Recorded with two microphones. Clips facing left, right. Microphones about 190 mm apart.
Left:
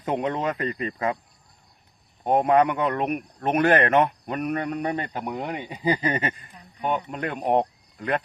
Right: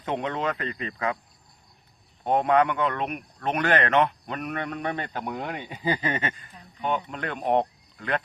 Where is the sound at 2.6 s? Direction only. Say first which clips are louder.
Left 2 dB; 35° left (ahead or behind).